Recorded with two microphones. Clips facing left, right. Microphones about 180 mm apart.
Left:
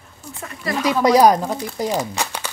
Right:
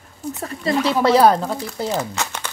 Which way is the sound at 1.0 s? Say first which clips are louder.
Left 2 dB; 15° left (ahead or behind).